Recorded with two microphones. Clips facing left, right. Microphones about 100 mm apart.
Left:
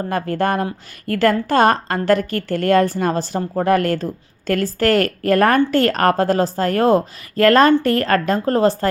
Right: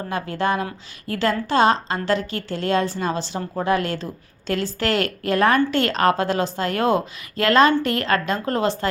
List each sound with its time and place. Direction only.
0.1 s a woman's voice: 50° left (ahead or behind)